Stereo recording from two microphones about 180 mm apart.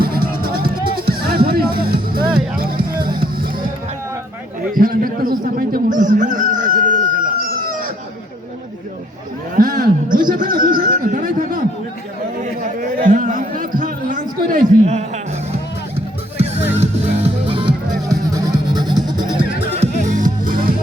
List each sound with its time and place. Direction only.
0.0 s music: 55° right (ahead or behind)
2.7 s music: 25° right (ahead or behind)
3.2 s music: 50° right (ahead or behind)
4.7 s a sound: 50° right (ahead or behind)
9.6 s a sound: 50° right (ahead or behind)
12.4 s chatter: 45° right (ahead or behind)
16.7 s music: 35° right (ahead or behind)
20.1 s music: 45° right (ahead or behind)